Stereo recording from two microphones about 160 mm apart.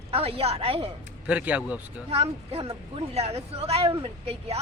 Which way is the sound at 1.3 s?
10° right (ahead or behind).